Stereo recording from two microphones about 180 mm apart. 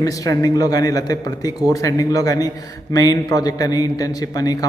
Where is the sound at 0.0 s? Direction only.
20° left (ahead or behind).